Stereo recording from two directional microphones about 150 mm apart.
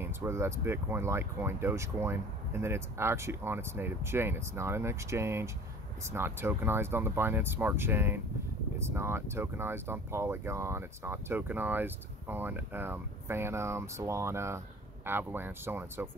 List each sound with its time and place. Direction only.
0.0 s speech: 15° right (ahead or behind)